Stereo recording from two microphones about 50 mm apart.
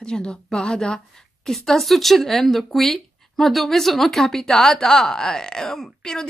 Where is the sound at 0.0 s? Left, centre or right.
Centre.